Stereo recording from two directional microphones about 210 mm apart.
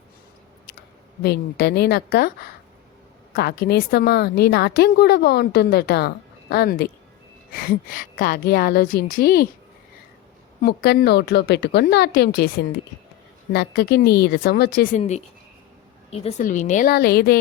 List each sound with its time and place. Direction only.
1.2 s a woman's voice: 50° left (ahead or behind)
10.6 s a woman's voice: 50° left (ahead or behind)
14.9 s a woman's voice: 30° left (ahead or behind)